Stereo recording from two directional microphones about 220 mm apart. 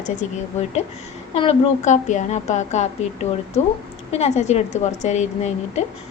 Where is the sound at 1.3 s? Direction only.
25° left (ahead or behind).